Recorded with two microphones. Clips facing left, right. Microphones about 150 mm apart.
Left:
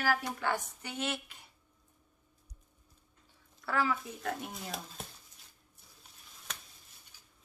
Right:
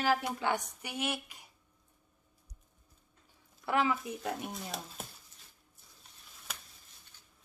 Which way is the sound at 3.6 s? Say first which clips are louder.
Right 2 dB; 20° right (ahead or behind).